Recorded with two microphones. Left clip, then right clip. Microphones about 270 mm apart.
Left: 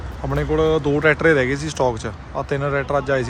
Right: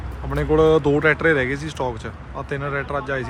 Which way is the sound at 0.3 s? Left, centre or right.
Centre.